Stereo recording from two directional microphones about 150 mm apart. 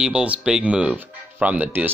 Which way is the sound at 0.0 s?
10° right (ahead or behind).